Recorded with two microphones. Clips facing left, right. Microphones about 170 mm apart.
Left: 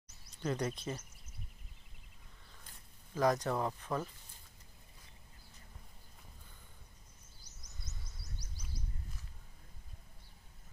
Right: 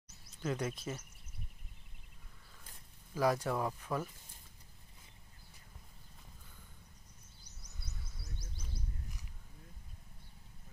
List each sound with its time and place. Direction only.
0.4 s speech: 5° right (ahead or behind)
3.2 s speech: 10° right (ahead or behind)
7.8 s a sound: 25° right (ahead or behind)